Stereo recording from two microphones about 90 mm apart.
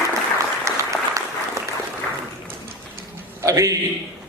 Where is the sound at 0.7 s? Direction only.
35° right (ahead or behind).